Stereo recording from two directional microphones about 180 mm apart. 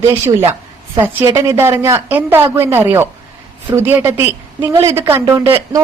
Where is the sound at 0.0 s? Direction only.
15° right (ahead or behind).